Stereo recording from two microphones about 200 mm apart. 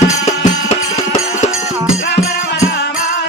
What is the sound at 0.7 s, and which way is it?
Music, 35° left (ahead or behind).